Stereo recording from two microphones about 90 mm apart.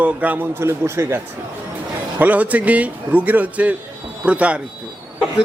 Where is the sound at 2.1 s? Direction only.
15° right (ahead or behind).